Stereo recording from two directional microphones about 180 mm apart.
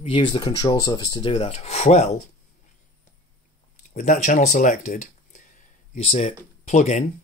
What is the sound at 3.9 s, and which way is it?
Speech, 45° left (ahead or behind).